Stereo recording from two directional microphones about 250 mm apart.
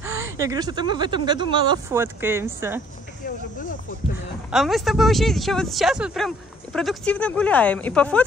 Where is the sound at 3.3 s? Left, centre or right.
Left.